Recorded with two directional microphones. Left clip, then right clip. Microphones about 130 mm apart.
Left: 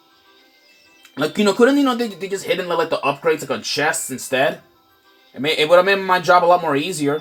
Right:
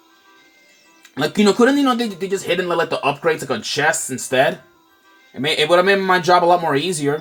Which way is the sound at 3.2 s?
25° right (ahead or behind).